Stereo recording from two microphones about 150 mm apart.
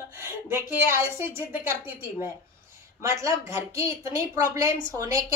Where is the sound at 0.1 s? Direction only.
15° right (ahead or behind).